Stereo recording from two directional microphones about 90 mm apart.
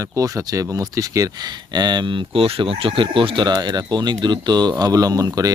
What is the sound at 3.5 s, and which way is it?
Speech, 50° right (ahead or behind).